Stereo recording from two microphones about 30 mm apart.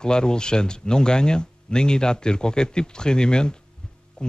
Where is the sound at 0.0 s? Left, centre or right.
Left.